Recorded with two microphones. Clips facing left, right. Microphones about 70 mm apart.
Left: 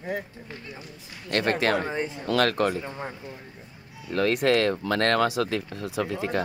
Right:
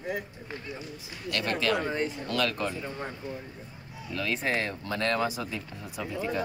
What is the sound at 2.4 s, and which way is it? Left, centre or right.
Speech, left.